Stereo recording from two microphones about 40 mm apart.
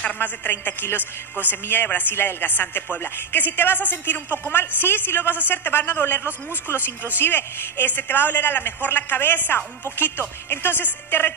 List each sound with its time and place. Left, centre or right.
0.2 s a woman's voice: left
1.9 s a man's voice: left